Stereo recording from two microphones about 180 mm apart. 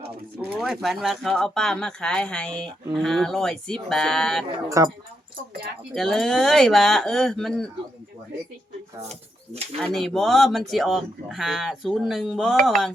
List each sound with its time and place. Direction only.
0.5 s speech: centre (ahead or behind)
4.8 s speech: 15° right (ahead or behind)
5.9 s speech: centre (ahead or behind)
9.0 s speech: 35° right (ahead or behind)
9.8 s speech: centre (ahead or behind)